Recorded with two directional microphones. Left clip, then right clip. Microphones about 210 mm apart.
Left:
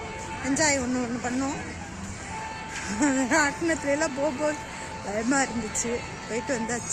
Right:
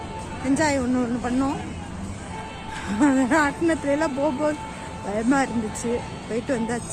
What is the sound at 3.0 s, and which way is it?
Speech, centre (ahead or behind).